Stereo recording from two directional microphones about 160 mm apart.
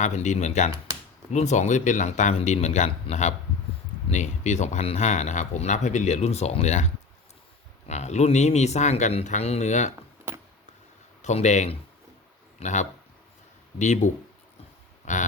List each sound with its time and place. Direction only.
0.0 s speech: 45° left (ahead or behind)
11.2 s speech: 45° left (ahead or behind)
15.0 s a sound: 50° left (ahead or behind)